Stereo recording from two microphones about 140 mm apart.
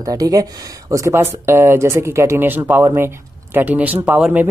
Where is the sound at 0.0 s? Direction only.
25° right (ahead or behind).